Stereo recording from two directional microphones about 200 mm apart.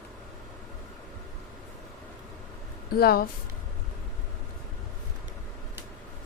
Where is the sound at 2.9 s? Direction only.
50° left (ahead or behind).